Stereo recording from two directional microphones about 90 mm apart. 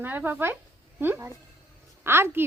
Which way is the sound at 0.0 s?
20° right (ahead or behind).